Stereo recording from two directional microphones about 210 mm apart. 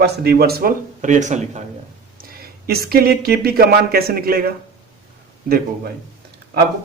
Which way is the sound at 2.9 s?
45° right (ahead or behind).